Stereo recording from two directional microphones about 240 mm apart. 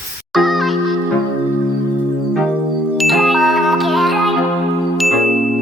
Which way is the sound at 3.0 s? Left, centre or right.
Centre.